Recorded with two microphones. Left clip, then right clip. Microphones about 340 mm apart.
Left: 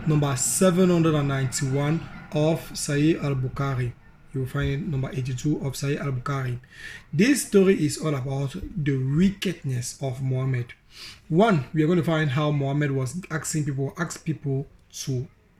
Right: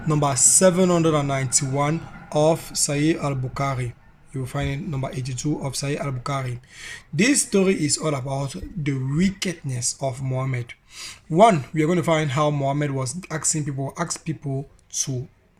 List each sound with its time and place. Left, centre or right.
0.1 s speech: centre